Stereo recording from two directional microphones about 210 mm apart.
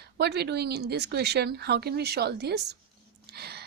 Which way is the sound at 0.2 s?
50° right (ahead or behind).